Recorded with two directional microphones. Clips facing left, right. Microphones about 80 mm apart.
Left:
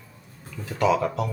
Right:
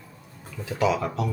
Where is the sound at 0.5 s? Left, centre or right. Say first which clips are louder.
Left 2 dB; centre.